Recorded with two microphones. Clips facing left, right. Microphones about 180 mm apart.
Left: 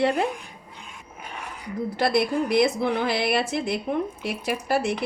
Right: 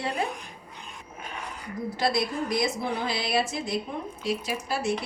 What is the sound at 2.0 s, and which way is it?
Speech, 60° left (ahead or behind).